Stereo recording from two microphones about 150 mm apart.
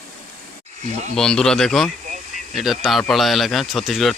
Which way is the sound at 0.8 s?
50° right (ahead or behind).